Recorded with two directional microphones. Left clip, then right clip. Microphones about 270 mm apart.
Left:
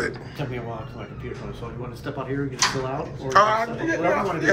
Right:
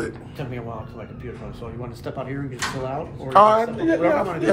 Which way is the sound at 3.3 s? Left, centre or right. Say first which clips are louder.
Right 4 dB; centre.